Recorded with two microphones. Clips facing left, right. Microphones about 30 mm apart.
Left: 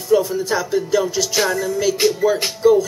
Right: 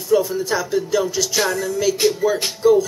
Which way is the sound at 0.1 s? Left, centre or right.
Centre.